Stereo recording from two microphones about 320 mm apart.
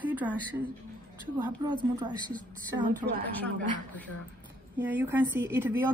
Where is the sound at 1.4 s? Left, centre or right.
Centre.